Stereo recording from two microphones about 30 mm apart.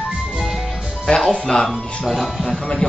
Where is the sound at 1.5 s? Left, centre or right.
Centre.